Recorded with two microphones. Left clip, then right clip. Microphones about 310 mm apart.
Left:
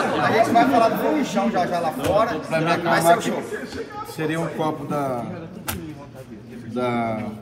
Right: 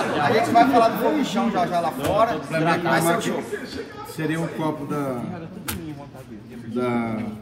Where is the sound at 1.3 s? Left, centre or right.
Centre.